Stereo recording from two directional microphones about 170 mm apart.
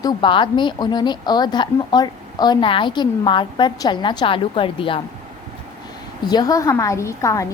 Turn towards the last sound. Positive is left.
turn(degrees=20)  # may be behind; listen again after turning